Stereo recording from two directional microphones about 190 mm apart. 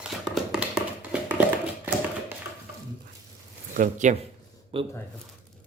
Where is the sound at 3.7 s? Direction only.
40° right (ahead or behind).